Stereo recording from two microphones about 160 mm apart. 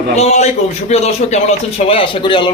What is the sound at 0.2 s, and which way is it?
A man's voice, 45° left (ahead or behind).